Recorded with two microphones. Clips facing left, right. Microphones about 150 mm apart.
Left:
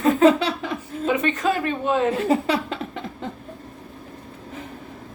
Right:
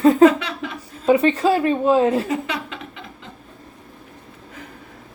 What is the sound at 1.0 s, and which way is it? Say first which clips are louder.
A woman's voice: right 6 dB; 30° right (ahead or behind).